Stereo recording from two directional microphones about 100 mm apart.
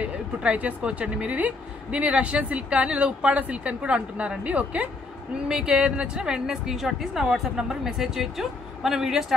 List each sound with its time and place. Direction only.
0.0 s a woman's voice: 15° right (ahead or behind)